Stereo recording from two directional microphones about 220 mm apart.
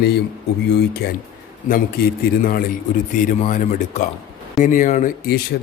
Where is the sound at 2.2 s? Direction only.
40° left (ahead or behind).